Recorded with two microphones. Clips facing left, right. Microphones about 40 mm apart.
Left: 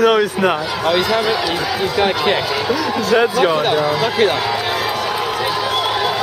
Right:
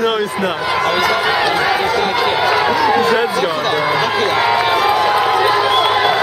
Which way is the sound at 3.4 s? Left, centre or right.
Centre.